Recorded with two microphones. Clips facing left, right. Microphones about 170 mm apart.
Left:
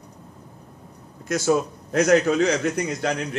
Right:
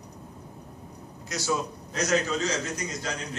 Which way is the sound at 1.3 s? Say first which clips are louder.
Left 8 dB; 55° left (ahead or behind).